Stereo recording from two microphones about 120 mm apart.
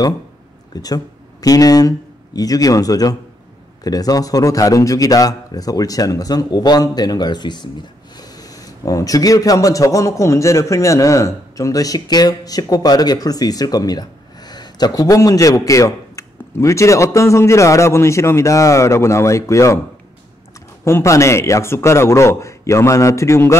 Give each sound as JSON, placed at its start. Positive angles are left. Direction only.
{"t": 0.7, "sound": "speech", "side_deg": 30}
{"t": 20.8, "sound": "speech", "side_deg": 25}